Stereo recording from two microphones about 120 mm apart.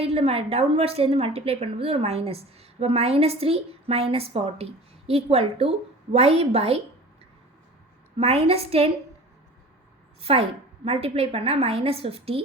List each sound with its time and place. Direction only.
0.0 s a woman's voice: 55° right (ahead or behind)
8.2 s a woman's voice: 60° right (ahead or behind)
10.2 s a woman's voice: 55° right (ahead or behind)